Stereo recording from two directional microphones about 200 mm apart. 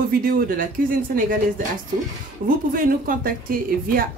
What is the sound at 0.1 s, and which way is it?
A woman's voice, 45° right (ahead or behind).